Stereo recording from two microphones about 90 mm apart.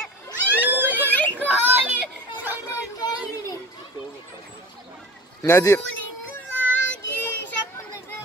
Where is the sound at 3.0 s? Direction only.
45° left (ahead or behind).